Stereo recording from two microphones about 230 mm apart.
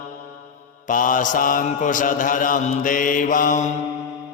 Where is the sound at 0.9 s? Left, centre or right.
Left.